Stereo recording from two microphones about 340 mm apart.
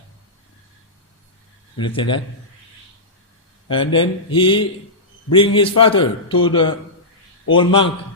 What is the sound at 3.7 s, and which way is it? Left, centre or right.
A man's voice, centre.